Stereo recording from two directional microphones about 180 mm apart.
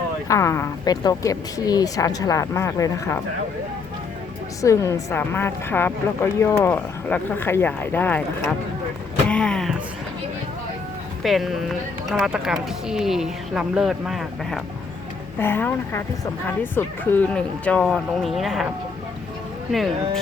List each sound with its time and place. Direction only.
0.3 s a woman's voice: 15° left (ahead or behind)
4.6 s a woman's voice: 15° left (ahead or behind)
9.3 s vehicle: 5° left (ahead or behind)
11.2 s speech: centre (ahead or behind)
15.4 s a woman's voice: 10° left (ahead or behind)